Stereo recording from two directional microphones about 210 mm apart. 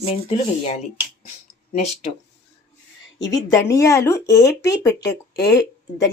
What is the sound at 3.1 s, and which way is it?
Speech, 20° left (ahead or behind).